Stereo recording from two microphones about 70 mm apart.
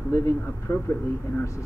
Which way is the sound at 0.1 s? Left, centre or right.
Left.